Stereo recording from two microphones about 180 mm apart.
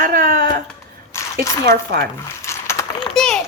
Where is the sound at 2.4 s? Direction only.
15° left (ahead or behind).